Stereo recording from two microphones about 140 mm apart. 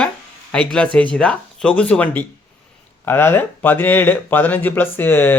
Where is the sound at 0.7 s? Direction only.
10° left (ahead or behind).